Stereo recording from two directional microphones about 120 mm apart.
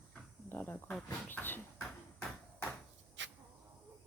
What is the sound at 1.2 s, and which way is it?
Bouncing, 15° left (ahead or behind).